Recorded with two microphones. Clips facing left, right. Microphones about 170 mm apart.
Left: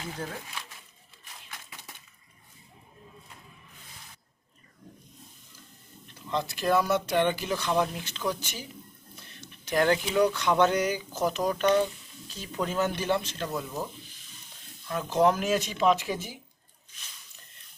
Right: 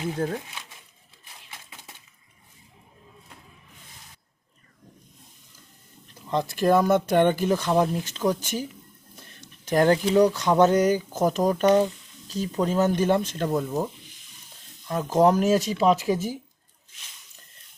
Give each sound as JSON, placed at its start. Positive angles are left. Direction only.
{"t": 0.2, "sound": "speech", "side_deg": -50}
{"t": 6.3, "sound": "speech", "side_deg": -45}
{"t": 9.1, "sound": "a sound", "side_deg": -45}
{"t": 10.3, "sound": "speech", "side_deg": -40}
{"t": 14.8, "sound": "speech", "side_deg": -40}